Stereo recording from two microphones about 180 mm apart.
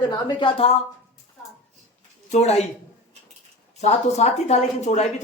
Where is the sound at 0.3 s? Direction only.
30° left (ahead or behind).